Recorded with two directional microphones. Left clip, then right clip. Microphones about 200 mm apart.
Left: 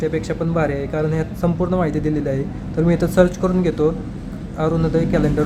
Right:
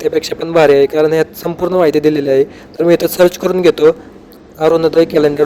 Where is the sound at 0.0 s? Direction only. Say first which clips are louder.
Right 6 dB; 40° right (ahead or behind).